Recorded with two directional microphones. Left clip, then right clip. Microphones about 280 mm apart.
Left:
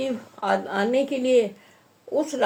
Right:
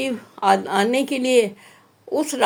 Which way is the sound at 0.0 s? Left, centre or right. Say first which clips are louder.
Right 6 dB; right.